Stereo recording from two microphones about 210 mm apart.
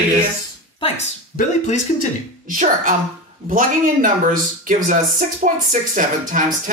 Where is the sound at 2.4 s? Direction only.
40° right (ahead or behind).